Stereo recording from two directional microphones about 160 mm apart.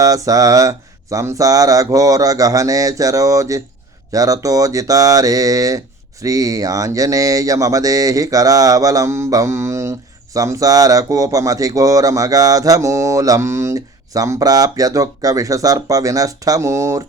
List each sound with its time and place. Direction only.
0.0 s speech: 20° right (ahead or behind)